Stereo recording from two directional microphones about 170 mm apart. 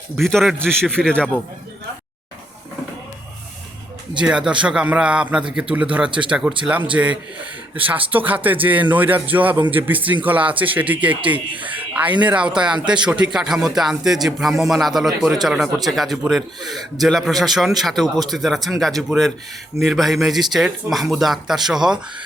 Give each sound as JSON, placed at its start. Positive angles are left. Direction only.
{"t": 0.2, "sound": "a man's voice", "side_deg": 0}
{"t": 4.2, "sound": "a man's voice", "side_deg": -5}
{"t": 6.1, "sound": "speech", "side_deg": -30}
{"t": 6.9, "sound": "speech", "side_deg": -5}
{"t": 11.6, "sound": "snake", "side_deg": -10}
{"t": 12.2, "sound": "a man's voice", "side_deg": -5}